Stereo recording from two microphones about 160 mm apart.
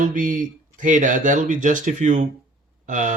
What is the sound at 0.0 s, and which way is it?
Speech, 55° right (ahead or behind).